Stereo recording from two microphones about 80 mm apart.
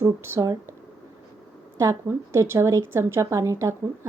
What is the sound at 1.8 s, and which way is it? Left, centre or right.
A woman's voice, right.